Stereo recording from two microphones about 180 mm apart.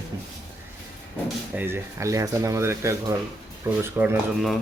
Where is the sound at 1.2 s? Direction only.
10° right (ahead or behind).